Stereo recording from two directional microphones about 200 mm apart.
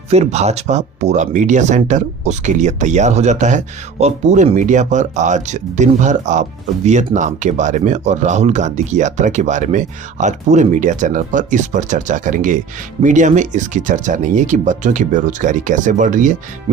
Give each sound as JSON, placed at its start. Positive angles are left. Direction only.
{"t": 0.1, "sound": "speech", "side_deg": -35}